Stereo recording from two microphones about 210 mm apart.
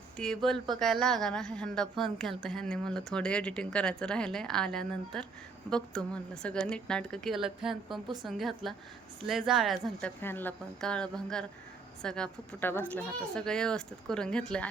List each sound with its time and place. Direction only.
0.2 s speech: centre (ahead or behind)
8.0 s speech: 20° right (ahead or behind)
8.3 s speech: centre (ahead or behind)